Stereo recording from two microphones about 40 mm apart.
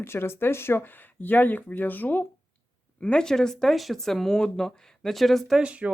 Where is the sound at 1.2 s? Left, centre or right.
Left.